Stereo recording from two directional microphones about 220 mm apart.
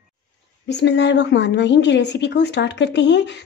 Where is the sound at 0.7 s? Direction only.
50° left (ahead or behind).